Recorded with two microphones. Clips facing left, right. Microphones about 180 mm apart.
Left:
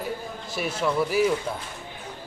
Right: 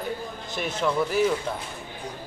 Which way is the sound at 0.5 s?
5° left (ahead or behind).